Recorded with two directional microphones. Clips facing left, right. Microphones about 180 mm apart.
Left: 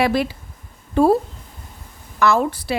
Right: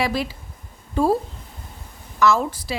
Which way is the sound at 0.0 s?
55° left (ahead or behind).